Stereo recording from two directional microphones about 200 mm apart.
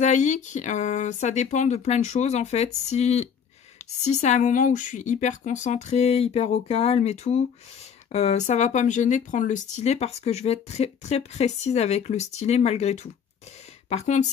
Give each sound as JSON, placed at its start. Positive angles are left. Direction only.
{"t": 0.0, "sound": "speech", "side_deg": 35}